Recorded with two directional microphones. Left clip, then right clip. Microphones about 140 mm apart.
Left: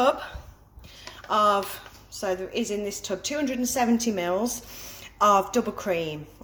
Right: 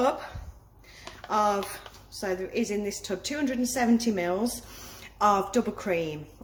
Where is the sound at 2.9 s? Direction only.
20° right (ahead or behind).